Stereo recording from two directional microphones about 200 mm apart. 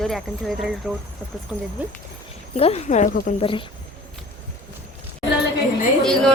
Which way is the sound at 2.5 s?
30° left (ahead or behind).